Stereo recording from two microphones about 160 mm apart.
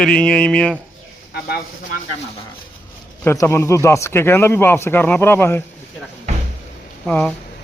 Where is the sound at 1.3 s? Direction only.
90° left.